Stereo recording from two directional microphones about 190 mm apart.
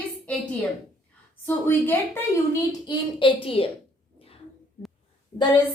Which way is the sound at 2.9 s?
25° left (ahead or behind).